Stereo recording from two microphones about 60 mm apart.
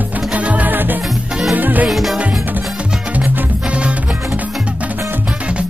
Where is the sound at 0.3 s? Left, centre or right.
Right.